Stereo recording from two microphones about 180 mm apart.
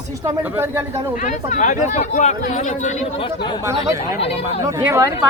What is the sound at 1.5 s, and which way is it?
Speech, 45° left (ahead or behind).